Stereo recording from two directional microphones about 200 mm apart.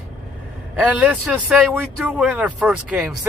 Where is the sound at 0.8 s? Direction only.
5° right (ahead or behind).